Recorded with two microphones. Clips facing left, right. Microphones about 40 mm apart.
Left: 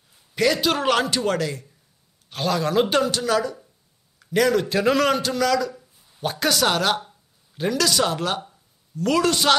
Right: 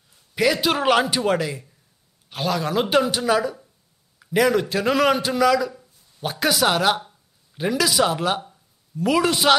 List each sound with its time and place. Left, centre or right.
0.4 s a man's voice: centre